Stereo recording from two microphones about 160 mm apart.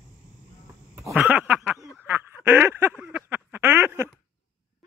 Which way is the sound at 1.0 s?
5° right (ahead or behind).